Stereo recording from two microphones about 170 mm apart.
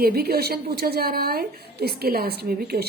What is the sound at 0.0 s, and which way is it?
Speech, 65° right (ahead or behind).